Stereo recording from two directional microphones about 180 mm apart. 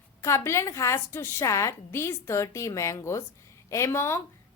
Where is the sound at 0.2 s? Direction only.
15° left (ahead or behind).